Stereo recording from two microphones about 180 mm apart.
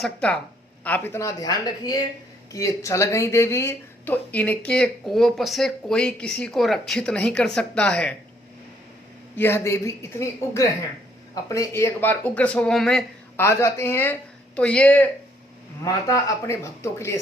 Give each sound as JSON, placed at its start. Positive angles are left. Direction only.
{"t": 0.0, "sound": "speech", "side_deg": 5}
{"t": 9.3, "sound": "speech", "side_deg": 10}
{"t": 13.4, "sound": "speech", "side_deg": 15}
{"t": 15.8, "sound": "speech", "side_deg": 20}